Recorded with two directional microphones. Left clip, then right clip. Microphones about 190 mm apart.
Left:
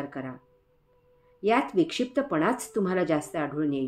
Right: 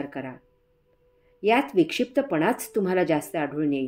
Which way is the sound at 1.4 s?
40° right (ahead or behind).